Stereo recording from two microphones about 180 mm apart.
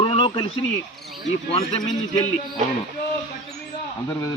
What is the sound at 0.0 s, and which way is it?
Radio, 30° left (ahead or behind).